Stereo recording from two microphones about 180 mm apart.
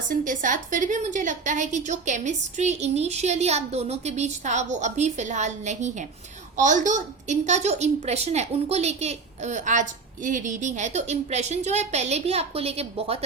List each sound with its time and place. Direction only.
0.1 s a woman's voice: 45° right (ahead or behind)